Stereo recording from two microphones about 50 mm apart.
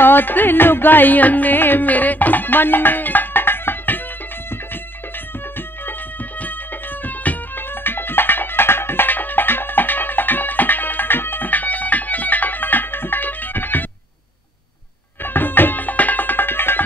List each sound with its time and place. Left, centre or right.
0.0 s music: left
7.1 s music: left
15.2 s music: left